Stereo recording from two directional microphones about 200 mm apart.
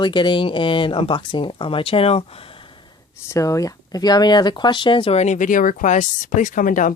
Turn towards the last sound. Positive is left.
turn(degrees=40)  # may be behind; listen again after turning